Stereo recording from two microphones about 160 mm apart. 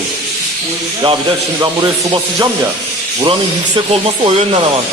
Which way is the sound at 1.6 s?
25° right (ahead or behind).